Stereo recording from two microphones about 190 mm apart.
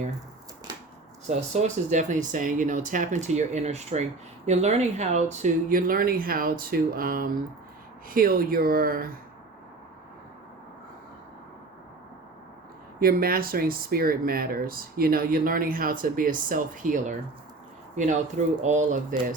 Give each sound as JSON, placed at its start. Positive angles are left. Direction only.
{"t": 1.3, "sound": "speech", "side_deg": -35}
{"t": 13.0, "sound": "speech", "side_deg": -50}